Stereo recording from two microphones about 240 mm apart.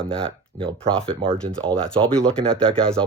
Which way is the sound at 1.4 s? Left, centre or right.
Right.